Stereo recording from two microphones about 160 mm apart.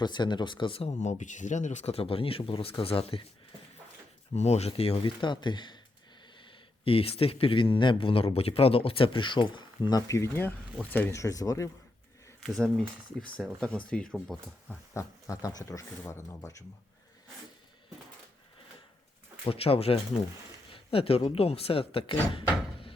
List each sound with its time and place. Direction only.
0.0 s speech: 30° left (ahead or behind)
4.4 s speech: 45° left (ahead or behind); by 11.7 s 20° left (ahead or behind)
12.5 s speech: 5° left (ahead or behind)
14.9 s speech: 20° left (ahead or behind)
19.5 s speech: 35° left (ahead or behind)